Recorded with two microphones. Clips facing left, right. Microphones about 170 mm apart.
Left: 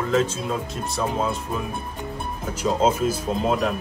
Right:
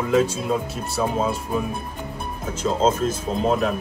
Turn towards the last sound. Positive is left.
turn(degrees=0)  # may be behind; listen again after turning